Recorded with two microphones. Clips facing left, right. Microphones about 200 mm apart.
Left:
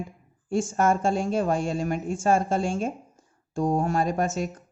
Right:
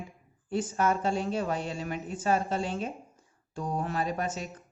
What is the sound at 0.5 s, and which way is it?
Speech, 45° left (ahead or behind).